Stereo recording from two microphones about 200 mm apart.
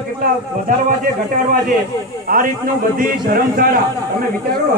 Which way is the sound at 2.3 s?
45° right (ahead or behind).